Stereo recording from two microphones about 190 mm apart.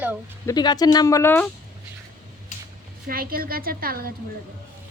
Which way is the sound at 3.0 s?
50° right (ahead or behind).